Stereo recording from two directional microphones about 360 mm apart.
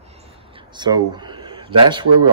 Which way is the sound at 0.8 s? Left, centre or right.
Centre.